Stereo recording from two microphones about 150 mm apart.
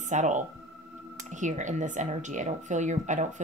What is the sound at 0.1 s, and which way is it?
Speech, 55° right (ahead or behind).